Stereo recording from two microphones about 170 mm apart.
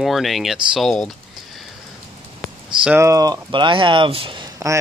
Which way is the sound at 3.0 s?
20° right (ahead or behind).